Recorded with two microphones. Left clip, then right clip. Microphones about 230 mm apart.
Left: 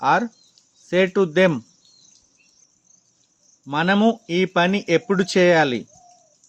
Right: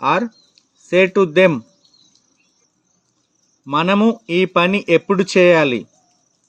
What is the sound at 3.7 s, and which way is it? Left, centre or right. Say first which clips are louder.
Speech: right 3 dB; centre.